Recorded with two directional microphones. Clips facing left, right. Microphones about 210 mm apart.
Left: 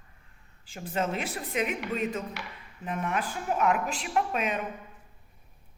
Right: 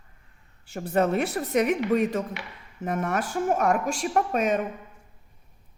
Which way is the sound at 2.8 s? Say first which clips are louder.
Right 4 dB; 45° right (ahead or behind).